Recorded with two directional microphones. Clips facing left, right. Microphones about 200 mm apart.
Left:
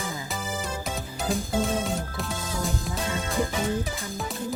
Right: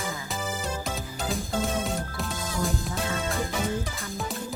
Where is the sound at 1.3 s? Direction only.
Centre (ahead or behind).